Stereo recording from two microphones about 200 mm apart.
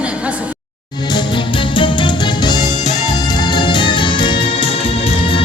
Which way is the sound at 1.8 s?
25° left (ahead or behind).